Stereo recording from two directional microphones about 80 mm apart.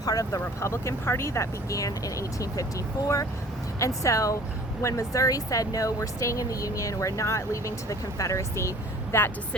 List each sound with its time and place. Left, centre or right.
0.0 s speech: left
3.8 s speech: left